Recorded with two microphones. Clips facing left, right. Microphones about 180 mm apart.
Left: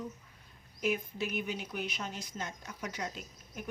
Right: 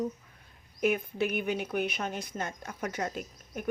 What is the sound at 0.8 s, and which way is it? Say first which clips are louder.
Speech: right 5 dB; 60° right (ahead or behind).